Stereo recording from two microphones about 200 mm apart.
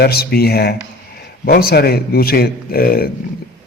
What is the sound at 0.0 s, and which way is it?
A man's voice, 50° left (ahead or behind).